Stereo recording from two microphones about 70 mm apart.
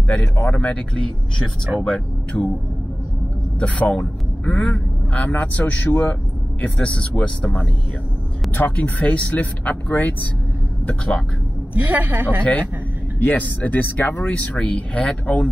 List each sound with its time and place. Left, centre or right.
0.1 s speech: centre
2.3 s speech: left
3.5 s a man's voice: left
11.7 s a woman's voice: right
13.2 s speech: left